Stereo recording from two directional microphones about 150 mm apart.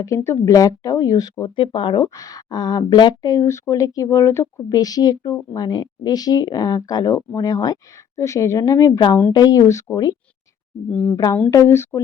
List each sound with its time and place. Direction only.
0.0 s speech: 20° left (ahead or behind)